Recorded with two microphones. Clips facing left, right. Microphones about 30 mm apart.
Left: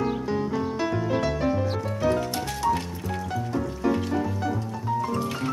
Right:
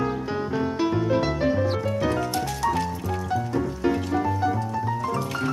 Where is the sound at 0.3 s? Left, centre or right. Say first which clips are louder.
Even; right.